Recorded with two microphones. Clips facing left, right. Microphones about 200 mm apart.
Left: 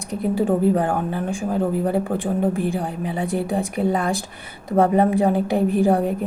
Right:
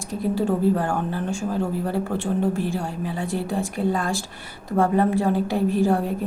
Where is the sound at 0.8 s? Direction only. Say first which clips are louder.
Left 3 dB; 20° left (ahead or behind).